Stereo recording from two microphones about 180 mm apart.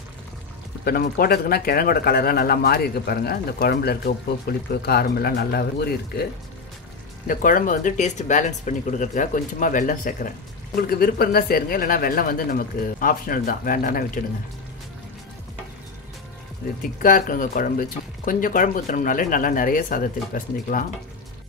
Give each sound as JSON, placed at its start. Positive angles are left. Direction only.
{"t": 0.8, "sound": "speech", "side_deg": 55}
{"t": 7.2, "sound": "speech", "side_deg": 50}
{"t": 16.8, "sound": "speech", "side_deg": 50}